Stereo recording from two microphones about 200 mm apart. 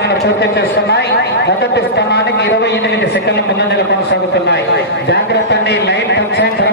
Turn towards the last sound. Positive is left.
turn(degrees=60)  # may be behind; listen again after turning